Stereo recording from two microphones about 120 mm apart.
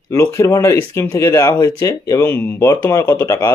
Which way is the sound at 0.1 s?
20° left (ahead or behind).